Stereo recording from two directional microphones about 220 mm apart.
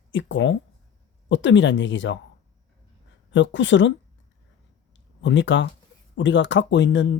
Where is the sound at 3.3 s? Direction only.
55° left (ahead or behind).